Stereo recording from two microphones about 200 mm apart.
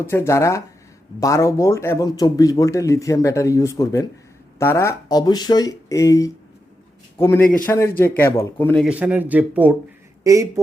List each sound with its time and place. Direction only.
0.1 s speech: 15° left (ahead or behind); by 10.6 s 15° right (ahead or behind)